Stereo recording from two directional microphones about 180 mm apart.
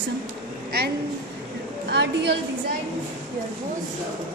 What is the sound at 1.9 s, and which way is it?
Speech, 70° right (ahead or behind).